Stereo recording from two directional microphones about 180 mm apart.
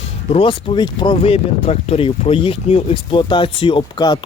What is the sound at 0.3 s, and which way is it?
Speech, 30° left (ahead or behind).